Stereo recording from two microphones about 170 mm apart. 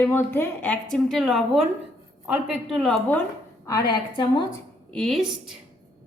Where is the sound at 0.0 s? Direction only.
15° left (ahead or behind).